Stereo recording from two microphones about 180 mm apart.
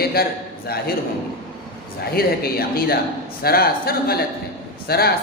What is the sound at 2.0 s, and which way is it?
A man's voice, 60° left (ahead or behind).